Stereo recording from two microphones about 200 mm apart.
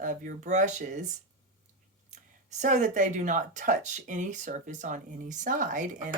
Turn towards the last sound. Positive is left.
turn(degrees=-40)  # may be behind; listen again after turning